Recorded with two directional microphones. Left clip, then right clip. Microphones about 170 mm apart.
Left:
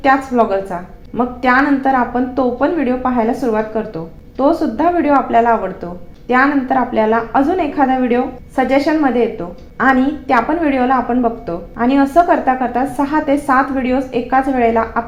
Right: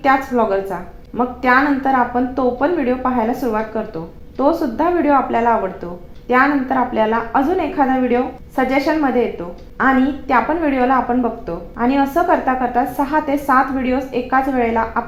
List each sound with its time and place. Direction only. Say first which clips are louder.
0.0 s a woman's voice: left 2 dB; 30° left (ahead or behind)